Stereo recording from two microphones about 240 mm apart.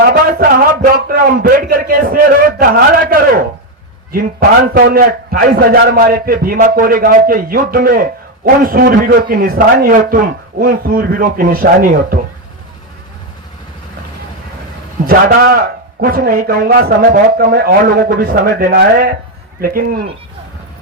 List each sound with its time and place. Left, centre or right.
0.1 s a man's voice: right
15.0 s a man's voice: right